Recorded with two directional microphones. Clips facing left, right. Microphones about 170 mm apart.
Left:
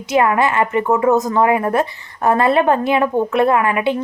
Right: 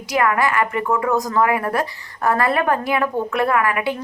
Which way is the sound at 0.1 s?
25° left (ahead or behind).